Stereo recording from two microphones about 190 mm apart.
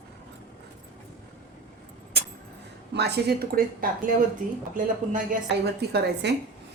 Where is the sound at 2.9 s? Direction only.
60° right (ahead or behind).